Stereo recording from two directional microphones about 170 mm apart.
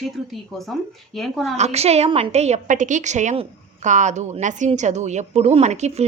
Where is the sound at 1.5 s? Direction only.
40° right (ahead or behind).